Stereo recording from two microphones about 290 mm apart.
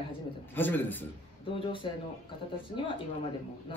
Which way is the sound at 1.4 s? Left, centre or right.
Centre.